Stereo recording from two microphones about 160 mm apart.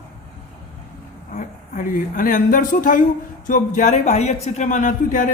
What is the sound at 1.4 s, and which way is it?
Speech, 60° left (ahead or behind).